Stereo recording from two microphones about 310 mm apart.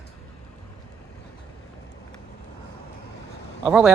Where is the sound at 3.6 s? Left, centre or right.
Centre.